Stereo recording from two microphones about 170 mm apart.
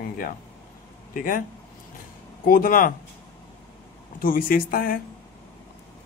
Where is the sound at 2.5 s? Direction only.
55° left (ahead or behind).